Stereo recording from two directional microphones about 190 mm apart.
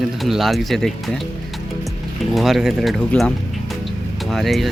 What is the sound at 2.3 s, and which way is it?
Speech, centre (ahead or behind).